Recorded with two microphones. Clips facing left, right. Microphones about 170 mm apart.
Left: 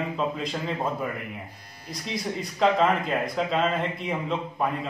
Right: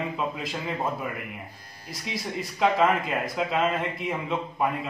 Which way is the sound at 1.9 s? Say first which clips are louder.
Left 2 dB; centre (ahead or behind).